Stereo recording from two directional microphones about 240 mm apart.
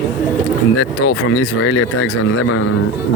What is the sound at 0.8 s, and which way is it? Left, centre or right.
Speech, left.